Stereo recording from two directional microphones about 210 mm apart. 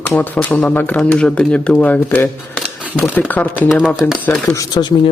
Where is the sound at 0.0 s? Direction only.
10° left (ahead or behind).